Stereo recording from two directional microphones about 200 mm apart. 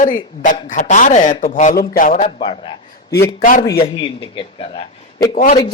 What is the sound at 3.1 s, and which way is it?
Speech, 15° left (ahead or behind).